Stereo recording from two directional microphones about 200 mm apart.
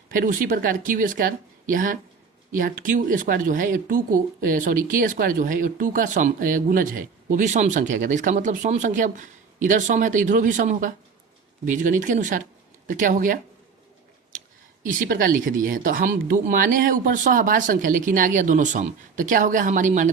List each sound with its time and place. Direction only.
0.1 s a woman's voice: 45° right (ahead or behind)
14.8 s a woman's voice: 45° right (ahead or behind)